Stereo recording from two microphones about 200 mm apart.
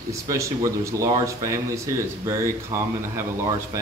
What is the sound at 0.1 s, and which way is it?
Speech, 15° right (ahead or behind).